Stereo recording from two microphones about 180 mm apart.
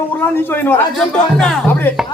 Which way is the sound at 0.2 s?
10° left (ahead or behind).